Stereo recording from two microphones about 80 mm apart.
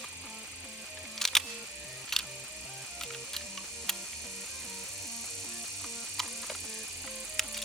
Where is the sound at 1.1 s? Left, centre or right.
Centre.